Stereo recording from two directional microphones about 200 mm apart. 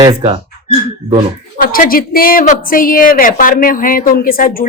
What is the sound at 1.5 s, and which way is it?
A woman's voice, 45° left (ahead or behind).